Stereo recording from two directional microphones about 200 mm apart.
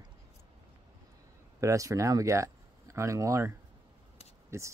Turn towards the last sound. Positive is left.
turn(degrees=-15)  # may be behind; listen again after turning